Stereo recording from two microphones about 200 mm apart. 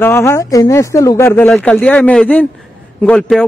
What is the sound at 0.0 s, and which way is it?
Speech, 10° left (ahead or behind).